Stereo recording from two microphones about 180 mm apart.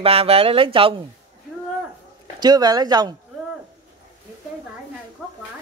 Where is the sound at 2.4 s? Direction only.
25° right (ahead or behind).